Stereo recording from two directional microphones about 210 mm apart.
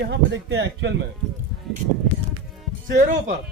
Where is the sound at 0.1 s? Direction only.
60° right (ahead or behind).